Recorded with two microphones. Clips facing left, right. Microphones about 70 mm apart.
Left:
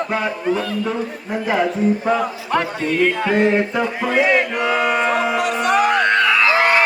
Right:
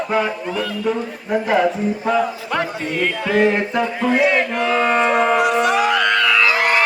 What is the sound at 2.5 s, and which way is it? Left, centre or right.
Music, left.